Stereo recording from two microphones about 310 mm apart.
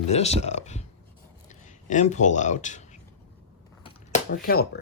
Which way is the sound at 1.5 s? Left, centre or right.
Left.